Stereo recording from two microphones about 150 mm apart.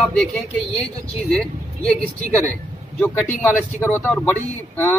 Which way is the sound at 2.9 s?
10° left (ahead or behind).